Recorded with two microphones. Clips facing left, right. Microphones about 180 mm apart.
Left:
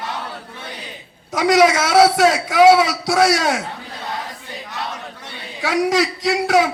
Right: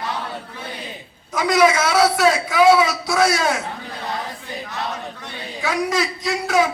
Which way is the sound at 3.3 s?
90° left.